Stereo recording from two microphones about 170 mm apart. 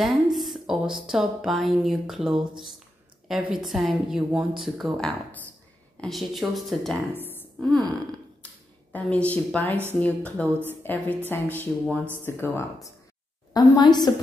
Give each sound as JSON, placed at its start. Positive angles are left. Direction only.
{"t": 0.0, "sound": "speech", "side_deg": 0}
{"t": 7.2, "sound": "a sound", "side_deg": 10}
{"t": 8.9, "sound": "a woman's voice", "side_deg": 10}
{"t": 10.4, "sound": "a woman's voice", "side_deg": -10}
{"t": 10.8, "sound": "a woman's voice", "side_deg": 10}